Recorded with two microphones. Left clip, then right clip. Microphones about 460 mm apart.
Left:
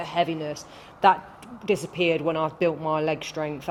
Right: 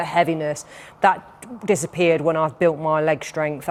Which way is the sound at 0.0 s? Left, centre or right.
Right.